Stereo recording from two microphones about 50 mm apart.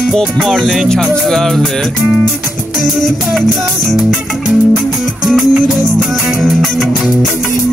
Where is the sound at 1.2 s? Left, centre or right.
Centre.